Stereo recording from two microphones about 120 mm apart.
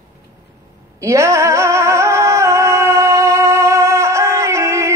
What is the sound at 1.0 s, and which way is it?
Singing, 25° right (ahead or behind).